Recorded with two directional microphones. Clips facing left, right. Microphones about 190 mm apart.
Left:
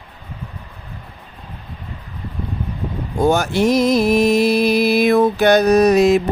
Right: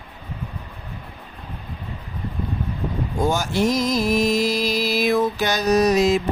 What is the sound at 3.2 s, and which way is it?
Music, 65° left (ahead or behind).